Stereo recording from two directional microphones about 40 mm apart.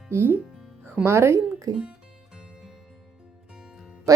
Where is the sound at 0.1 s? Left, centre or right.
Right.